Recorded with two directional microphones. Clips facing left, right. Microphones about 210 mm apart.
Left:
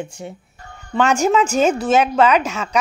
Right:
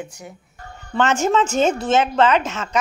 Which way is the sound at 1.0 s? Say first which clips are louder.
Left 2 dB; 10° left (ahead or behind).